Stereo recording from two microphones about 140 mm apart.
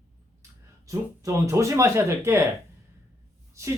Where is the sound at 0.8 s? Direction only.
20° right (ahead or behind).